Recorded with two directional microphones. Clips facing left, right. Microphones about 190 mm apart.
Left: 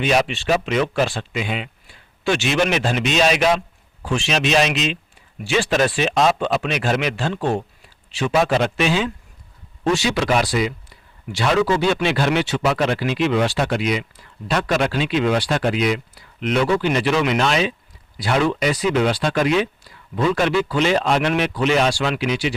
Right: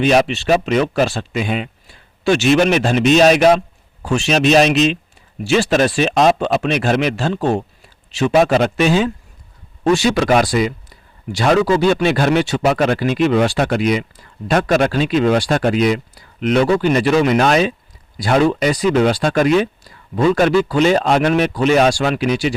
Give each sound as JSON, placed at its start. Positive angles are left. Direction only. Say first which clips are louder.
{"t": 0.0, "sound": "speech", "louder": "right 5 dB", "side_deg": -40}